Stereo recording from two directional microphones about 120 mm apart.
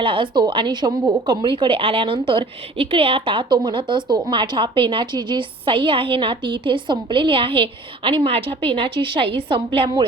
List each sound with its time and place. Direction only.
0.0 s a woman's voice: 45° right (ahead or behind)